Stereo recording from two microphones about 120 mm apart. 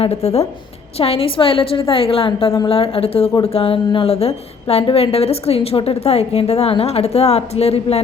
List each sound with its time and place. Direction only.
0.0 s a woman's voice: 55° left (ahead or behind)